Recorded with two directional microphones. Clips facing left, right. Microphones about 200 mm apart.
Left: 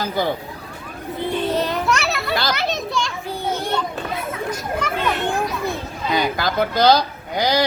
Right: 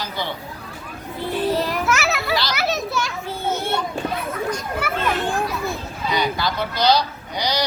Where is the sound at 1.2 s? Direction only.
20° left (ahead or behind).